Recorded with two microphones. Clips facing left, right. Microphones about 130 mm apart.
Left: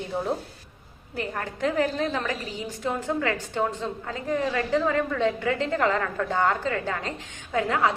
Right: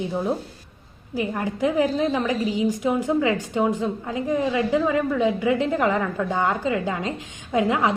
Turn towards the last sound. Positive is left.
turn(degrees=-15)  # may be behind; listen again after turning